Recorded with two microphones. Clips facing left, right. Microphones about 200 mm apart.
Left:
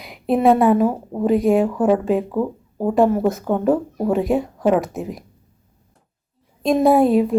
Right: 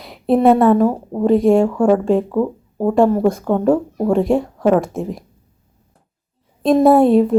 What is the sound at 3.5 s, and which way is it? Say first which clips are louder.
Speech: right 2 dB; 45° right (ahead or behind).